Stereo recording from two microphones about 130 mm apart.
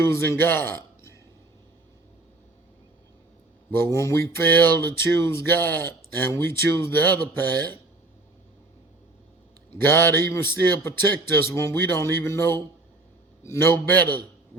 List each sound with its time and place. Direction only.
0.0 s speech: 15° left (ahead or behind)
3.9 s speech: 20° left (ahead or behind)
9.7 s speech: 15° left (ahead or behind)